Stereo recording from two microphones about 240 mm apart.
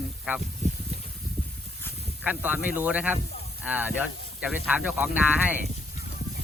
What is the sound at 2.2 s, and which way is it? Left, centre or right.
Speech, centre.